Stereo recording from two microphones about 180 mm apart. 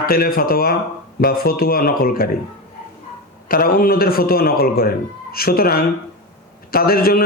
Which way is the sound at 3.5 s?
55° left (ahead or behind).